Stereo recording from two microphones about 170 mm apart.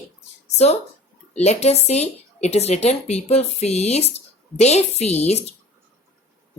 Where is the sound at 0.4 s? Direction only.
40° left (ahead or behind).